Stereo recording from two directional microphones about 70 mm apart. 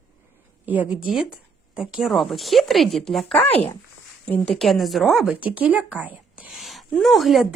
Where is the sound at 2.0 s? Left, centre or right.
Centre.